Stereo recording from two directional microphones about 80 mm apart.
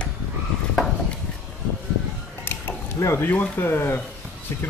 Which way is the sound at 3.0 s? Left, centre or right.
Left.